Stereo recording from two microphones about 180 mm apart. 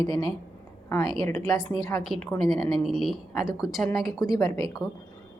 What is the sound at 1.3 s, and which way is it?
Speech, 15° left (ahead or behind).